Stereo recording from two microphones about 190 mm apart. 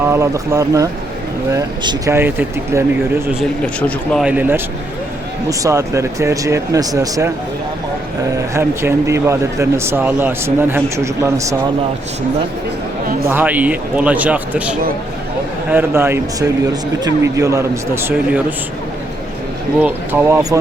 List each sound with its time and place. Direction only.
0.0 s speech: 15° right (ahead or behind)
3.8 s speech: 5° left (ahead or behind)
4.3 s speech: 10° right (ahead or behind)
8.5 s speech: 15° right (ahead or behind)
13.2 s speech: 10° right (ahead or behind)
19.8 s speech: 10° right (ahead or behind)